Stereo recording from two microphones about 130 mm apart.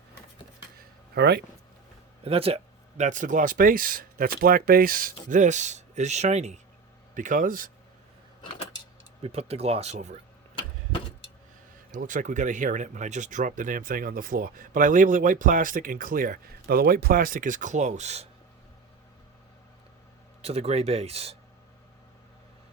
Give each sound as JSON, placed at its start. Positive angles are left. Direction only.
{"t": 2.2, "sound": "speech", "side_deg": -50}
{"t": 3.0, "sound": "speech", "side_deg": -75}
{"t": 7.1, "sound": "speech", "side_deg": -80}
{"t": 9.2, "sound": "speech", "side_deg": -50}
{"t": 11.9, "sound": "speech", "side_deg": -90}
{"t": 20.4, "sound": "speech", "side_deg": -50}